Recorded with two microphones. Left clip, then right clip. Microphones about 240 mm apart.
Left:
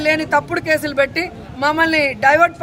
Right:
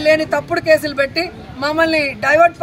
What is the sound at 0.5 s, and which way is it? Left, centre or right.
Speech, centre.